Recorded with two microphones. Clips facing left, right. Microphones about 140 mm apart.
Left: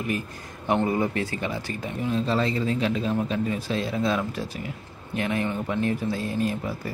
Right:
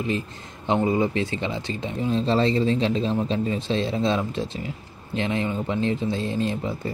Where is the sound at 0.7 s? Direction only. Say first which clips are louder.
Right 3 dB; 20° right (ahead or behind).